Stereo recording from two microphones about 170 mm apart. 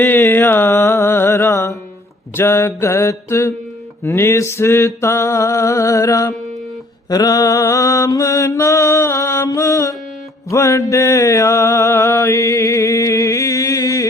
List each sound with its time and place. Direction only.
0.0 s music: 10° left (ahead or behind)
2.3 s a sound: 15° left (ahead or behind)
7.1 s mantra: 20° left (ahead or behind)